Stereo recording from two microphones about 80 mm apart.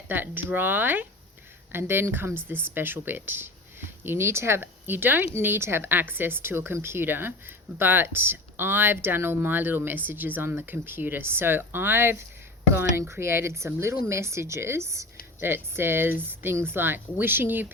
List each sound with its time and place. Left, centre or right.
0.1 s speech: right